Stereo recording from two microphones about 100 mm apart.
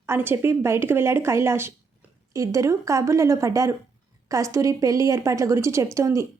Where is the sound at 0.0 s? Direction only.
25° right (ahead or behind).